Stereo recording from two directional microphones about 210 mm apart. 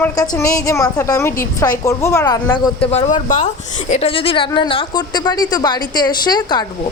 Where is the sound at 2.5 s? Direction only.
25° left (ahead or behind).